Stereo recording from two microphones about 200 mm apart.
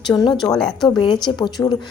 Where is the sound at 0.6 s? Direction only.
5° left (ahead or behind).